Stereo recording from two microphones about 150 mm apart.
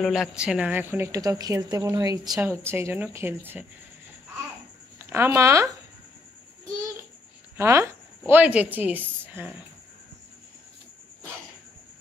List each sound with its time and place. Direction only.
0.0 s a woman's voice: centre (ahead or behind)
4.9 s speech: 15° right (ahead or behind)
7.5 s speech: 15° right (ahead or behind)